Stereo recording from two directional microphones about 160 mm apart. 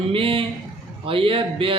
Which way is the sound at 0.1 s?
35° right (ahead or behind).